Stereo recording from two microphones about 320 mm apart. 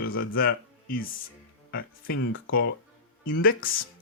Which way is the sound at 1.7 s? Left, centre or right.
Left.